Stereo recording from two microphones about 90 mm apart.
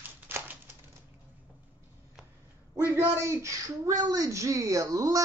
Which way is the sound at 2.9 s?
25° right (ahead or behind).